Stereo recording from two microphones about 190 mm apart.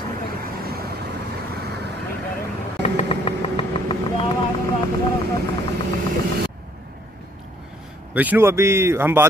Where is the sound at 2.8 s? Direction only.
30° left (ahead or behind).